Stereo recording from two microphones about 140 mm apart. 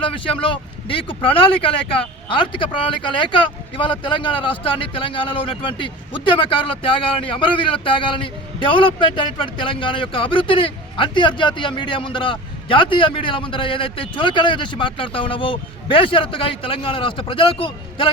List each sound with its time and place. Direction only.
0.0 s speech: 40° left (ahead or behind)